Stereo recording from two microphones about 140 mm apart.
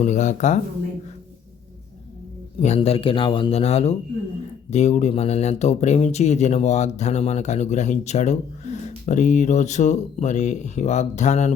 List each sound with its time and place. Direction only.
0.0 s speech: 60° left (ahead or behind)
2.6 s speech: 50° left (ahead or behind)